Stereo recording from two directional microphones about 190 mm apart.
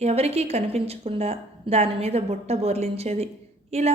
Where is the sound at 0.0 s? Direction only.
35° right (ahead or behind).